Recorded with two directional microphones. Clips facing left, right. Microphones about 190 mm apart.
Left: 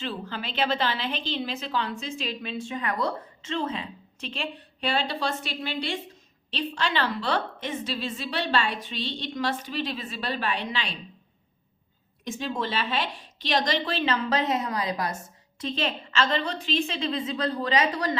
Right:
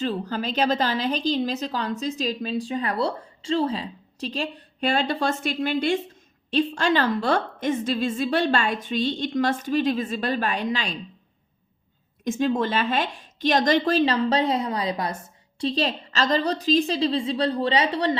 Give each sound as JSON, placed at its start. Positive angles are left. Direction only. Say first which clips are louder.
{"t": 0.0, "sound": "a woman's voice", "louder": "right 7 dB", "side_deg": -40}
{"t": 12.2, "sound": "a woman's voice", "louder": "right 8 dB", "side_deg": -50}